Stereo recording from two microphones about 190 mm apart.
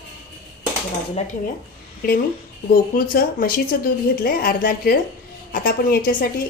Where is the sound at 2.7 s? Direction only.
50° left (ahead or behind).